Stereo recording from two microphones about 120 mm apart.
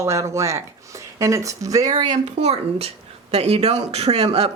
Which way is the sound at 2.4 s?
60° right (ahead or behind).